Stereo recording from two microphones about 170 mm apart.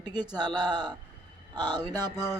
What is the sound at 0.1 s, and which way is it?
Speech, 25° right (ahead or behind).